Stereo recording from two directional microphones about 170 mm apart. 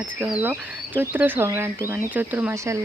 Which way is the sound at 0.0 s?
10° right (ahead or behind).